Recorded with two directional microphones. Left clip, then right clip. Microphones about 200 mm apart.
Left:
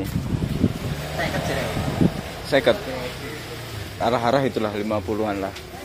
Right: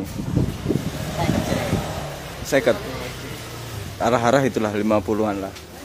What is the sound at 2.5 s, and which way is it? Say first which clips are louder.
Speech: even; 20° right (ahead or behind).